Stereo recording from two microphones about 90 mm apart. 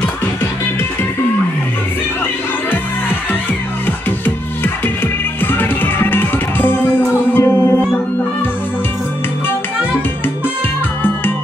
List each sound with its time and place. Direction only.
5.4 s music: 20° left (ahead or behind)